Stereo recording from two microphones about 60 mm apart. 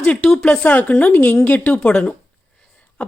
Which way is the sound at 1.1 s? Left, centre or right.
Left.